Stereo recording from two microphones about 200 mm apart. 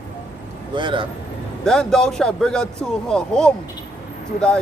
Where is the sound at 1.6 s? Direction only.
5° left (ahead or behind).